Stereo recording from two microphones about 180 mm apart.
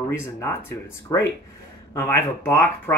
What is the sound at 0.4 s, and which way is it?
Speech, 15° left (ahead or behind).